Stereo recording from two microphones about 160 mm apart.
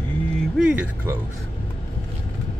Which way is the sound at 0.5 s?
5° right (ahead or behind).